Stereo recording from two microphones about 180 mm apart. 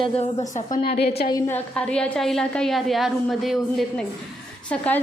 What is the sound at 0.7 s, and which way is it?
Speech, 60° left (ahead or behind).